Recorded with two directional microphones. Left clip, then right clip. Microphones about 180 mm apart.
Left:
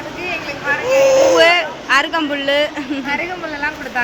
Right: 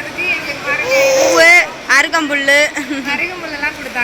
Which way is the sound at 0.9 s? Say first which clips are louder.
Even; 35° left (ahead or behind).